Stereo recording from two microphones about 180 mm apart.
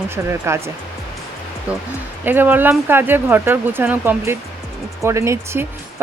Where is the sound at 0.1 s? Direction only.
15° right (ahead or behind).